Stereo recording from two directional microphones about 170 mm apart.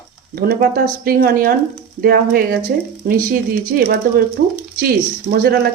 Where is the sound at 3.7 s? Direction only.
65° right (ahead or behind).